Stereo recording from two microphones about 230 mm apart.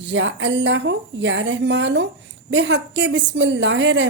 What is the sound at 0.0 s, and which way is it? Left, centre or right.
A woman's voice, right.